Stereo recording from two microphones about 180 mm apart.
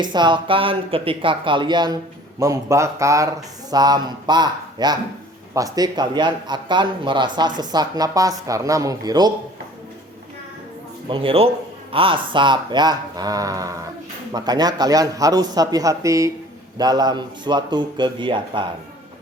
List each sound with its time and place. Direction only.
0.0 s a man's voice: 25° right (ahead or behind)
11.1 s a man's voice: 30° right (ahead or behind)